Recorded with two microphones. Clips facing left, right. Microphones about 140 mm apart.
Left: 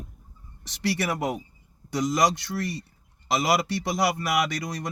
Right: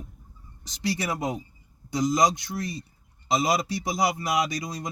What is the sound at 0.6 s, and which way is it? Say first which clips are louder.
A man's voice: left 2 dB; 75° left (ahead or behind).